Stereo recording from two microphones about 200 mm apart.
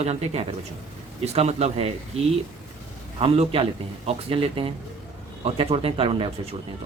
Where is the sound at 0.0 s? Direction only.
30° right (ahead or behind).